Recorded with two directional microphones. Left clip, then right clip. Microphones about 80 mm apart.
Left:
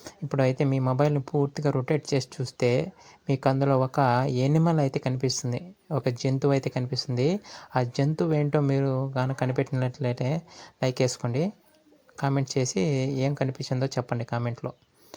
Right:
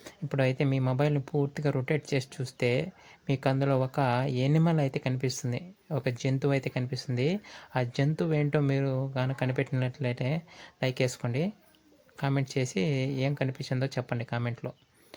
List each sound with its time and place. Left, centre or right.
0.0 s speech: left
12.5 s speech: left
14.6 s speech: centre